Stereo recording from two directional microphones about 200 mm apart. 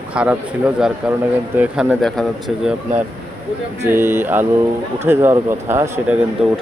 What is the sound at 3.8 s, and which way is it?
Speech, 10° right (ahead or behind).